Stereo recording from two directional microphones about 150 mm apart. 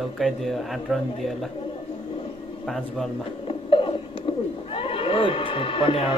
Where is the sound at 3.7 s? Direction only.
35° left (ahead or behind).